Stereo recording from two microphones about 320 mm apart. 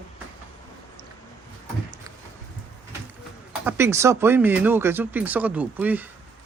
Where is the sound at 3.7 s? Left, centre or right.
Centre.